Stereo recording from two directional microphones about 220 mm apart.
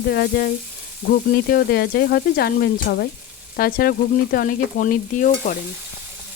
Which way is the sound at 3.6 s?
40° left (ahead or behind).